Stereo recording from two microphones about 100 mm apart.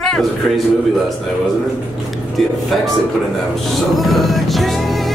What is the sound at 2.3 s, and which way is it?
Speech, centre (ahead or behind).